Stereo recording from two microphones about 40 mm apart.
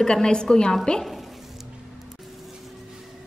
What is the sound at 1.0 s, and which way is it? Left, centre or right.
Sizzle, centre.